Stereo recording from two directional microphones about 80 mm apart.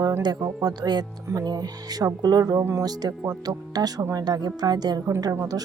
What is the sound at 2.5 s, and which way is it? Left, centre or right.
Speech, right.